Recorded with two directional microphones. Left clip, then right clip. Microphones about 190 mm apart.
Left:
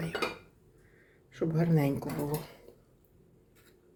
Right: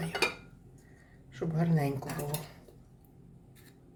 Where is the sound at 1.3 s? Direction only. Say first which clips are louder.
Left 3 dB; 35° left (ahead or behind).